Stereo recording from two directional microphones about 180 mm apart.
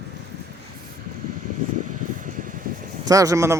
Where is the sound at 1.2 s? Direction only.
50° right (ahead or behind).